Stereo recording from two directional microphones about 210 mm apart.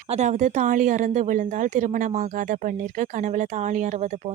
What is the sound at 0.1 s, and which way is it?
Speech, 35° right (ahead or behind).